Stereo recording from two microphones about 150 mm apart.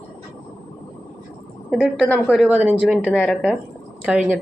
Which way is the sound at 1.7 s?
Centre (ahead or behind).